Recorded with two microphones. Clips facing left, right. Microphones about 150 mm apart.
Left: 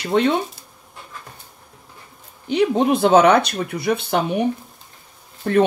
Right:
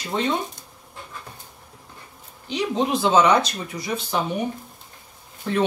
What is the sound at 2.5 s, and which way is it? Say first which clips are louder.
Speech: left 6 dB; 55° left (ahead or behind).